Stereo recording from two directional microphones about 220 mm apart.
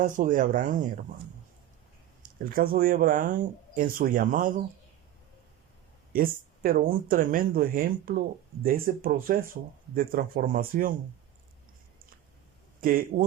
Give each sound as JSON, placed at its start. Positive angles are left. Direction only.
{"t": 0.0, "sound": "speech", "side_deg": -35}
{"t": 2.4, "sound": "speech", "side_deg": -40}
{"t": 6.1, "sound": "speech", "side_deg": -40}
{"t": 12.8, "sound": "speech", "side_deg": -40}